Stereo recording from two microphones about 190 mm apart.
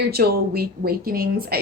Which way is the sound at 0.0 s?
55° right (ahead or behind).